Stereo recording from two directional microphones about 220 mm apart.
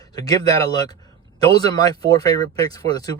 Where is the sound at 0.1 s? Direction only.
15° left (ahead or behind).